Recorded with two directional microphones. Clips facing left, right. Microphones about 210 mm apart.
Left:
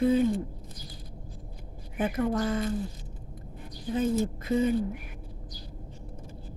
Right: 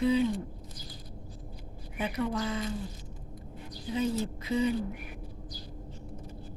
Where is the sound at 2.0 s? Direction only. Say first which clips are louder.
Left 4 dB; 50° left (ahead or behind).